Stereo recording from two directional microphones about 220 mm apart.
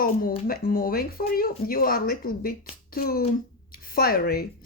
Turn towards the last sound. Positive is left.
turn(degrees=45)  # may be behind; listen again after turning